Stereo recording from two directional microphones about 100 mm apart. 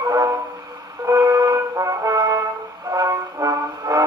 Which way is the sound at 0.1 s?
35° right (ahead or behind).